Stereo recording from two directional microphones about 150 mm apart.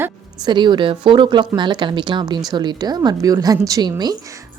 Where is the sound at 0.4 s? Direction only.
30° right (ahead or behind).